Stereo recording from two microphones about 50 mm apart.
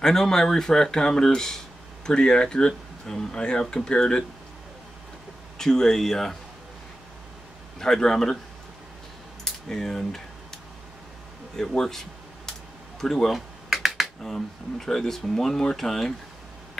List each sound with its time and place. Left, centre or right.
0.0 s speech: centre
5.6 s speech: centre
7.8 s speech: centre
9.4 s speech: centre
11.7 s speech: centre
13.7 s computer keyboard: centre
14.3 s speech: centre